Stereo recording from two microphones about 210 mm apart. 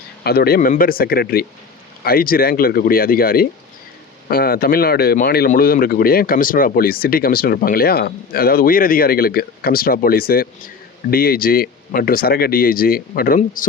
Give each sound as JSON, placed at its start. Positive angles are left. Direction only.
{"t": 0.3, "sound": "speech", "side_deg": 45}